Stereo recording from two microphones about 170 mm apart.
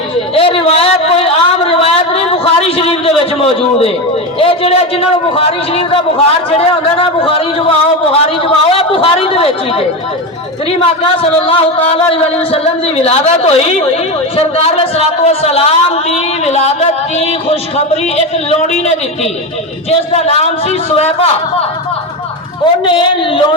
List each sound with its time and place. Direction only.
0.3 s a sound: 35° left (ahead or behind)
4.4 s a man's voice: 35° left (ahead or behind)
22.8 s a man's voice: 30° left (ahead or behind)